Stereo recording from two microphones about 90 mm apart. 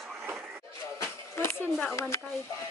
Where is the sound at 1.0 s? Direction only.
30° left (ahead or behind).